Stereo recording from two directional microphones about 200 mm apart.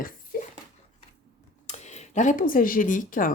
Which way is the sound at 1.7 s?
35° left (ahead or behind).